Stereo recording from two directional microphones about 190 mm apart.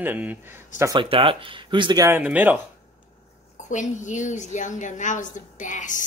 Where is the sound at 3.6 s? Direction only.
40° left (ahead or behind).